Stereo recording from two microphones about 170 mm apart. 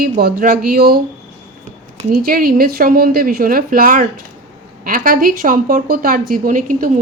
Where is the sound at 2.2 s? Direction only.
60° right (ahead or behind).